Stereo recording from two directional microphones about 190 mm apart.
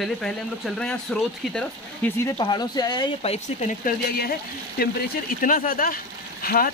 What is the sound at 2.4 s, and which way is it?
Speech, 20° left (ahead or behind).